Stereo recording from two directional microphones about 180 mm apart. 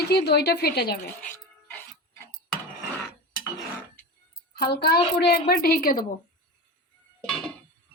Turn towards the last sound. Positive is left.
turn(degrees=5)  # may be behind; listen again after turning